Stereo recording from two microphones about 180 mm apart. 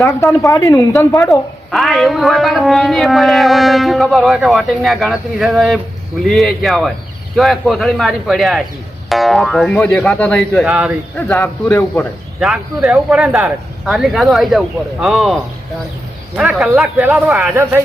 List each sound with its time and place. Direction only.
0.0 s speech: 15° left (ahead or behind)
1.7 s speech: centre (ahead or behind)
11.3 s speech: 10° left (ahead or behind)
12.4 s speech: centre (ahead or behind)